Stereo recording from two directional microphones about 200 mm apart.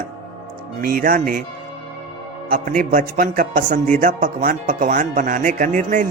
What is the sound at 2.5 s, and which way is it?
Speech, 45° right (ahead or behind).